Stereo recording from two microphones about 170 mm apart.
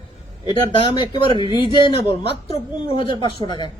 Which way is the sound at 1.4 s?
30° left (ahead or behind).